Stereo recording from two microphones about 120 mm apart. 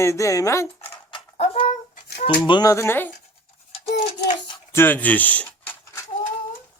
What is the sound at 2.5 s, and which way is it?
Speech, 30° left (ahead or behind).